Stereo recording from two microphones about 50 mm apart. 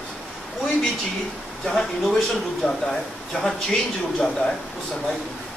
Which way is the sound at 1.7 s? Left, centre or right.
Centre.